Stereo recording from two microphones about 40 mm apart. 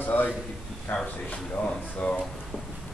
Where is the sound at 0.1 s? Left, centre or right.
Left.